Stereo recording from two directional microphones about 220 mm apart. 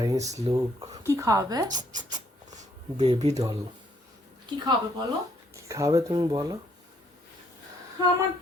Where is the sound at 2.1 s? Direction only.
35° right (ahead or behind).